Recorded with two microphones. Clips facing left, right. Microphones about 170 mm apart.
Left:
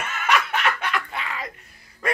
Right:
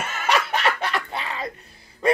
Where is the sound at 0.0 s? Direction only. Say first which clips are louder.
Even; 35° right (ahead or behind).